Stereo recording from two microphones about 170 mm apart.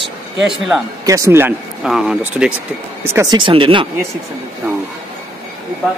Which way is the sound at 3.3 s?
30° right (ahead or behind).